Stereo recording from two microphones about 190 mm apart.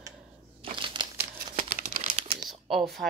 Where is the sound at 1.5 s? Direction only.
50° right (ahead or behind).